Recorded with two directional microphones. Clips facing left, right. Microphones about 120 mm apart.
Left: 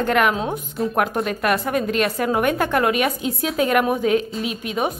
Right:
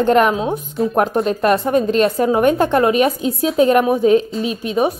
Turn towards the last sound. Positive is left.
turn(degrees=-30)  # may be behind; listen again after turning